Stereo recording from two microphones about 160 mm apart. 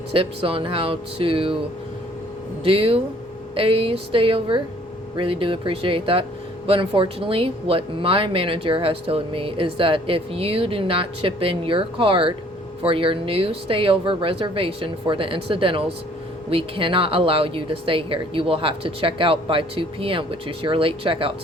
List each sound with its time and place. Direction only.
0.1 s speech: 35° right (ahead or behind)
2.6 s speech: 35° right (ahead or behind)